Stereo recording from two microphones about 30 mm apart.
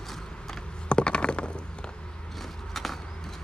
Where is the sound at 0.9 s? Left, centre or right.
Left.